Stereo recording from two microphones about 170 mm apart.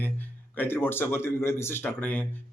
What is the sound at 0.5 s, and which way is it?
Speech, 10° left (ahead or behind).